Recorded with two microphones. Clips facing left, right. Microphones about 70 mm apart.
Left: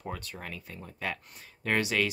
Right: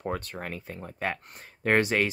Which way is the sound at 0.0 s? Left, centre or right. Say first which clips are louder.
Right 6 dB; right.